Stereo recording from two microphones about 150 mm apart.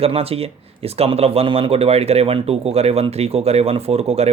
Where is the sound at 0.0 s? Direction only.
40° right (ahead or behind).